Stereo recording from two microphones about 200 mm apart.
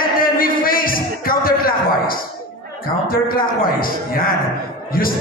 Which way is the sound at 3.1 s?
45° left (ahead or behind).